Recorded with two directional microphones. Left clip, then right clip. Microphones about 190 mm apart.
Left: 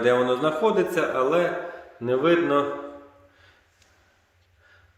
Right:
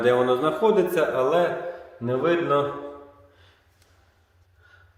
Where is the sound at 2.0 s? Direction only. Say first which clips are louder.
Left 1 dB; 20° left (ahead or behind).